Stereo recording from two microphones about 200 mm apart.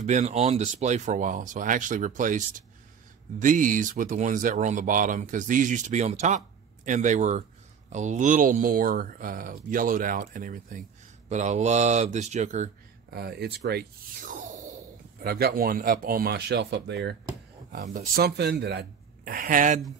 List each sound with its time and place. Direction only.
0.0 s speech: 35° right (ahead or behind)
13.1 s speech: 55° right (ahead or behind); by 14.8 s 35° right (ahead or behind)
15.2 s speech: 50° right (ahead or behind)
17.8 s speech: 45° right (ahead or behind)